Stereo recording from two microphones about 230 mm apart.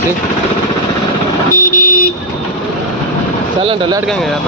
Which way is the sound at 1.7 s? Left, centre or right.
Left.